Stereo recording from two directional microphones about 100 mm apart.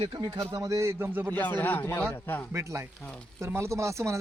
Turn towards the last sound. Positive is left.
turn(degrees=-30)  # may be behind; listen again after turning